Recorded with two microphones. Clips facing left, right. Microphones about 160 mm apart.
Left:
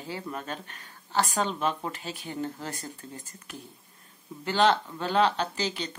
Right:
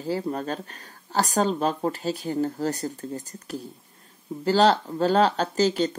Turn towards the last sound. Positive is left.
turn(degrees=-40)  # may be behind; listen again after turning